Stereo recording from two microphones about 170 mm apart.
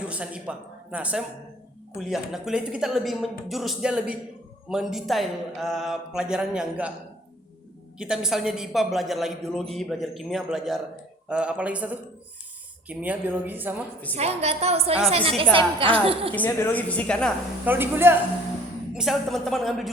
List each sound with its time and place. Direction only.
0.1 s a man's voice: 5° right (ahead or behind)
7.9 s a woman's voice: 5° right (ahead or behind)
12.9 s a woman's voice: 10° right (ahead or behind)
14.2 s a woman's voice: 40° right (ahead or behind)
16.3 s a woman's voice: 10° left (ahead or behind)
17.7 s a woman's voice: 10° right (ahead or behind)
18.9 s a woman's voice: centre (ahead or behind)